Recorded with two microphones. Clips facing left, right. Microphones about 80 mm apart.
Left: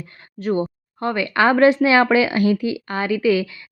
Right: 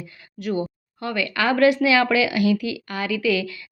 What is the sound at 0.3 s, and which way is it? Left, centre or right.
Speech, left.